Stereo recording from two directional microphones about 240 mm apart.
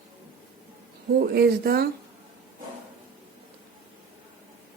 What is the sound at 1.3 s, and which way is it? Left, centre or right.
Speech, right.